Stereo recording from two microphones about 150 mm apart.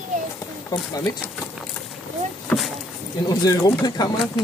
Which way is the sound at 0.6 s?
25° left (ahead or behind).